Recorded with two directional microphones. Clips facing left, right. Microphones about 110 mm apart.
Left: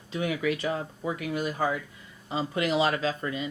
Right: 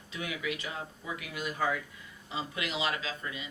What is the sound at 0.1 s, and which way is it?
Speech, 35° left (ahead or behind).